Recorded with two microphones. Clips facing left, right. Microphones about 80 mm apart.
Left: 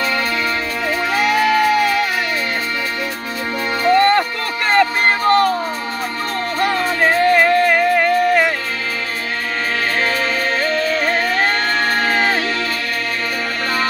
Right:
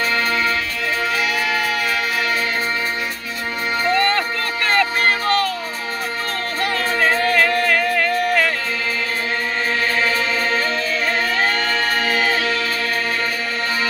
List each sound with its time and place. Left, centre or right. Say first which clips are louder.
1.1 s music: left 6 dB; left
3.8 s music: left 6 dB; left
6.6 s music: left 3 dB; left
10.6 s music: left 3 dB; left